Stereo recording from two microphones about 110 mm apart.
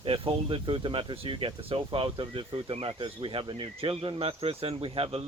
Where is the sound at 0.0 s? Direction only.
50° right (ahead or behind).